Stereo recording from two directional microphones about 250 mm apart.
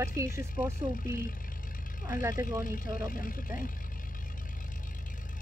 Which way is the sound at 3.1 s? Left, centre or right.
Left.